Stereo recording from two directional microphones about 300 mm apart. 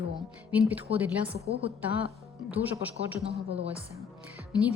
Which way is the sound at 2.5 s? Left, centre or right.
Centre.